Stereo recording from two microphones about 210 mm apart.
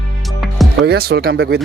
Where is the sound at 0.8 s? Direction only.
50° right (ahead or behind).